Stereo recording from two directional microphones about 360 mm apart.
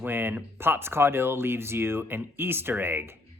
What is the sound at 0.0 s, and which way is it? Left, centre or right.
Speech, centre.